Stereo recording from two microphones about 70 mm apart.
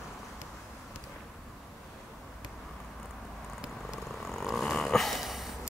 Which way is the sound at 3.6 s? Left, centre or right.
Centre.